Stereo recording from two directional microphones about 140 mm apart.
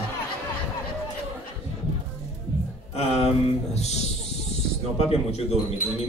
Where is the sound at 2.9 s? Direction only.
50° left (ahead or behind).